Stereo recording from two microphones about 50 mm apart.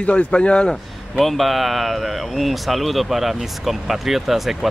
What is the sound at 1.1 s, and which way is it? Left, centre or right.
Speech, centre.